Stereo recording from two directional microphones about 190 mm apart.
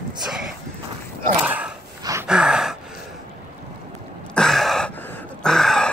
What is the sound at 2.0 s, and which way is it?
Gasp, 15° right (ahead or behind).